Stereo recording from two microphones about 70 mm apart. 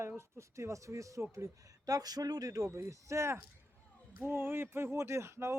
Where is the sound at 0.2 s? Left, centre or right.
Right.